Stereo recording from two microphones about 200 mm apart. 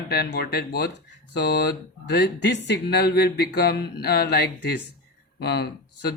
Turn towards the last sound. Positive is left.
turn(degrees=55)  # may be behind; listen again after turning